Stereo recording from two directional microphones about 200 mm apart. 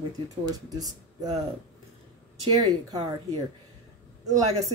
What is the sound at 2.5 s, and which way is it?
Speech, 20° right (ahead or behind).